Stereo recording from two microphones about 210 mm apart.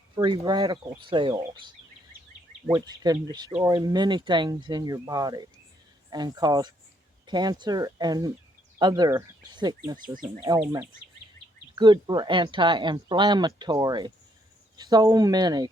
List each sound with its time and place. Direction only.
0.2 s speech: 20° right (ahead or behind)
11.7 s speech: 20° right (ahead or behind)